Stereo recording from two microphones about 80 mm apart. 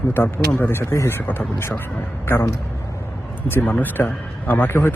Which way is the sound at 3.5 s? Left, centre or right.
Left.